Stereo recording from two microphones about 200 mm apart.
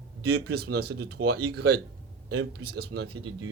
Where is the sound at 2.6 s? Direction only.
55° right (ahead or behind).